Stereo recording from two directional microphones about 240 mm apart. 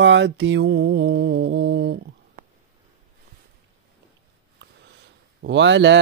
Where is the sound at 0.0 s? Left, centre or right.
Right.